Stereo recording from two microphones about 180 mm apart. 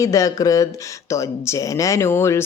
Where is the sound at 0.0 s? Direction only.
20° left (ahead or behind).